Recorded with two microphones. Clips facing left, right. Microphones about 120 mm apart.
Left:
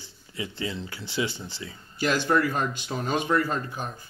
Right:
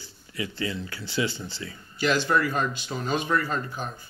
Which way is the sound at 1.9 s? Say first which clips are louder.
Even; 45° left (ahead or behind).